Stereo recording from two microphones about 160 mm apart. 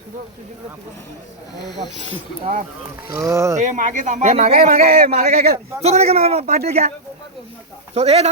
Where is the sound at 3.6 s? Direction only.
50° right (ahead or behind).